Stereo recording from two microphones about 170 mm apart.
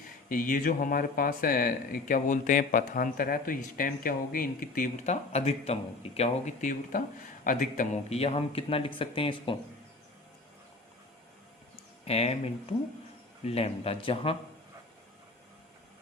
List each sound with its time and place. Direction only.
0.3 s speech: 55° left (ahead or behind); by 9.6 s 30° left (ahead or behind)
12.0 s speech: 40° left (ahead or behind)
13.4 s speech: 35° left (ahead or behind)